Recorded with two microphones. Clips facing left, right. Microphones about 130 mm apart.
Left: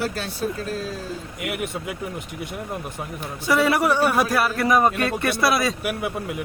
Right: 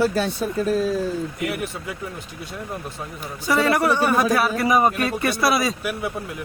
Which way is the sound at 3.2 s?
Centre (ahead or behind).